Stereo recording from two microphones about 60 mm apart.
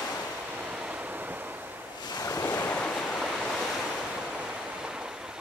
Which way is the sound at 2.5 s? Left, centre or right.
Left.